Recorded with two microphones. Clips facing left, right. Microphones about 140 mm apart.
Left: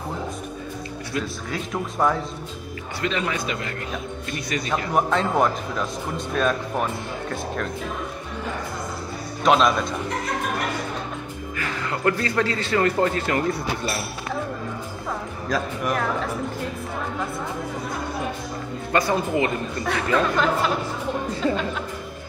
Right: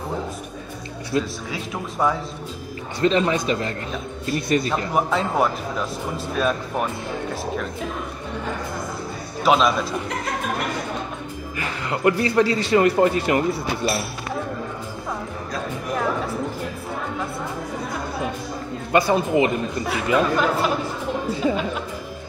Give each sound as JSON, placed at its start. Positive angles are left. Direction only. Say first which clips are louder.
{"t": 1.1, "sound": "speech", "louder": "right 5 dB", "side_deg": -30}
{"t": 1.5, "sound": "speech", "louder": "left 1 dB", "side_deg": 0}
{"t": 3.0, "sound": "a man's voice", "louder": "right 7 dB", "side_deg": -30}
{"t": 4.9, "sound": "speech", "louder": "left 1 dB", "side_deg": -5}
{"t": 9.4, "sound": "speech", "louder": "even", "side_deg": -5}
{"t": 11.5, "sound": "a man's voice", "louder": "right 1 dB", "side_deg": -15}
{"t": 15.5, "sound": "speech", "louder": "left 4 dB", "side_deg": 90}
{"t": 18.9, "sound": "speech", "louder": "right 3 dB", "side_deg": -20}